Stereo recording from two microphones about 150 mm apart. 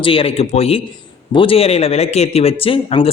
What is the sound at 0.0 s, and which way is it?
A man's voice, 40° left (ahead or behind).